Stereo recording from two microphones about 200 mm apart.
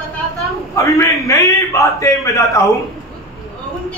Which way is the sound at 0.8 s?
15° left (ahead or behind).